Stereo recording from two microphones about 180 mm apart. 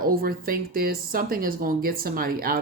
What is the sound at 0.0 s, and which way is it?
Speech, 55° right (ahead or behind).